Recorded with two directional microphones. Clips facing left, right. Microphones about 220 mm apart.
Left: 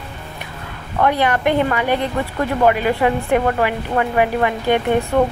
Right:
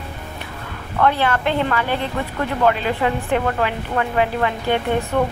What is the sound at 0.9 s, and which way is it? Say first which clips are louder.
Speech: left 1 dB; 15° left (ahead or behind).